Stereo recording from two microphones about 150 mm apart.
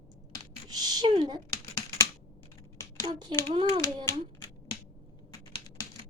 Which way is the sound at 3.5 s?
40° right (ahead or behind).